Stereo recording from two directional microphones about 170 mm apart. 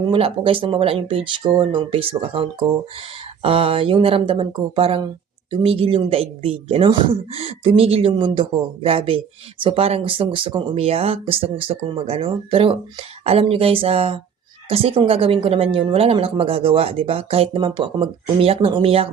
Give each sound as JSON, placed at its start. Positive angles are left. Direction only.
{"t": 0.1, "sound": "speech", "side_deg": -35}